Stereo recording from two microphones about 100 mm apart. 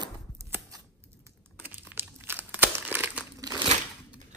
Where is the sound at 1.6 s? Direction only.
15° right (ahead or behind).